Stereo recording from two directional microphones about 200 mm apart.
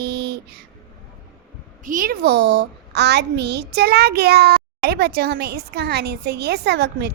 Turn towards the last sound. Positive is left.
turn(degrees=-55)  # may be behind; listen again after turning